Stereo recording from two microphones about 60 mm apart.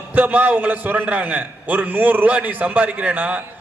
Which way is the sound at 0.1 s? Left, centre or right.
Right.